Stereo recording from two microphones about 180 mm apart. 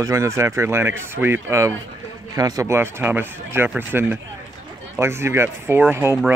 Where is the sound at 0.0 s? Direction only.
15° right (ahead or behind).